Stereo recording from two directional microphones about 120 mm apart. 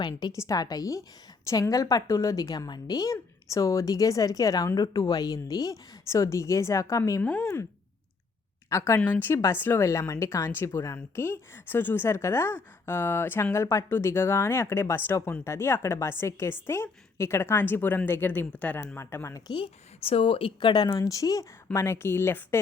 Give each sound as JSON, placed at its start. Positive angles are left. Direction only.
{"t": 0.0, "sound": "a woman's voice", "side_deg": 35}
{"t": 7.2, "sound": "speech", "side_deg": 15}
{"t": 8.7, "sound": "speech", "side_deg": 25}
{"t": 9.0, "sound": "speech", "side_deg": 15}
{"t": 19.5, "sound": "a woman's voice", "side_deg": 50}
{"t": 20.9, "sound": "speech", "side_deg": 30}